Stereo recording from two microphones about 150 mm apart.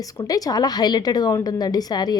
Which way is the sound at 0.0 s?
25° left (ahead or behind).